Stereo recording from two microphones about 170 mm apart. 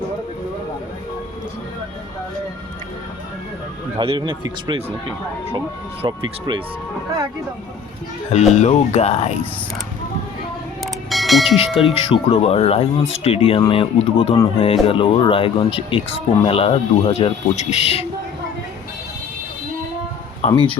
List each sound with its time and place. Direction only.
3.9 s speech: 30° right (ahead or behind)
6.0 s speech: 25° right (ahead or behind)
8.3 s speech: 40° left (ahead or behind)
11.1 s speech: centre (ahead or behind)
12.0 s speech: 35° left (ahead or behind)